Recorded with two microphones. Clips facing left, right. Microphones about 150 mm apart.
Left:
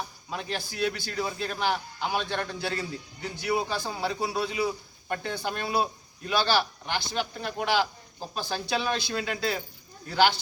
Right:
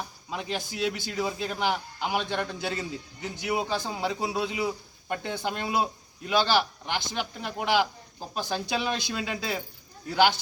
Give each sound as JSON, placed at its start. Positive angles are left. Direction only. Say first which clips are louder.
{"t": 0.3, "sound": "a man's voice", "louder": "right 2 dB", "side_deg": -15}